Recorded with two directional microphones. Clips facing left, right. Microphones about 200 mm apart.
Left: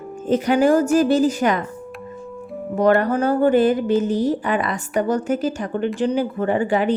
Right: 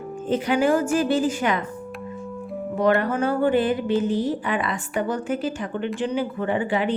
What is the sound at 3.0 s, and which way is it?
A woman's voice, 35° left (ahead or behind).